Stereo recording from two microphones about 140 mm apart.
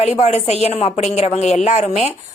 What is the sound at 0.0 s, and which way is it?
A woman's voice, 50° left (ahead or behind).